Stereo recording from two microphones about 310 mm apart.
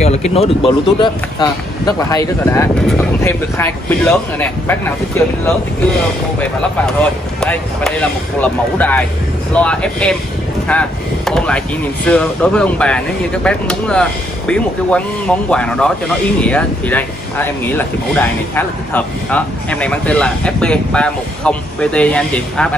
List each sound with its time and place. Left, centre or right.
0.0 s speech: centre
7.3 s speech: centre